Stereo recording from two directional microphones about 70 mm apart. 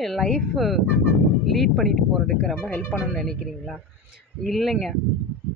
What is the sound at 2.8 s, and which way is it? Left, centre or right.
Speech, centre.